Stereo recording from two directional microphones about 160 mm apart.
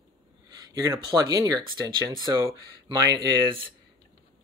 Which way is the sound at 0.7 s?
20° right (ahead or behind).